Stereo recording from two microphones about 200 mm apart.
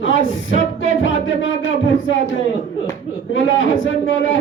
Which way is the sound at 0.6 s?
70° left (ahead or behind).